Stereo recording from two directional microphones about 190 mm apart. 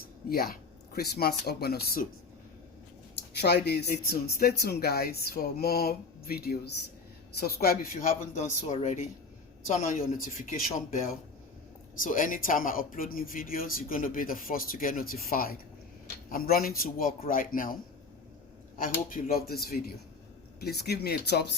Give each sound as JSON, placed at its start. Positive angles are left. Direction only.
{"t": 0.3, "sound": "speech", "side_deg": 50}
{"t": 3.4, "sound": "speech", "side_deg": 60}
{"t": 8.6, "sound": "speech", "side_deg": 35}
{"t": 11.9, "sound": "speech", "side_deg": 45}
{"t": 18.8, "sound": "speech", "side_deg": 50}